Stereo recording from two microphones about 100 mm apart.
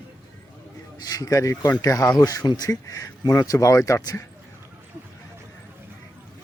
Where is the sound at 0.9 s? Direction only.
40° left (ahead or behind).